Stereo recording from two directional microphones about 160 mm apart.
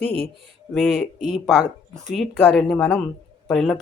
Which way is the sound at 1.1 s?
45° right (ahead or behind).